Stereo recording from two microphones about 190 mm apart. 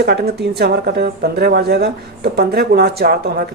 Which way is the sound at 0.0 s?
55° right (ahead or behind).